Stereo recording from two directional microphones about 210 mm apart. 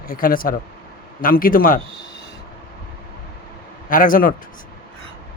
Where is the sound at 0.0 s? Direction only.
40° left (ahead or behind).